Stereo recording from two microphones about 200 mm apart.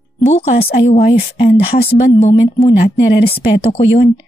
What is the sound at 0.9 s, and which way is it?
Speech, 45° left (ahead or behind).